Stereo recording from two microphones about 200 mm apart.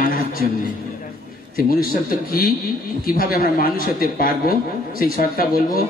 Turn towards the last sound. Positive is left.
turn(degrees=45)  # may be behind; listen again after turning